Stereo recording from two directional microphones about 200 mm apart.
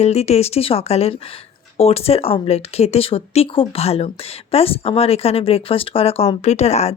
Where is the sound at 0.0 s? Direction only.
30° left (ahead or behind).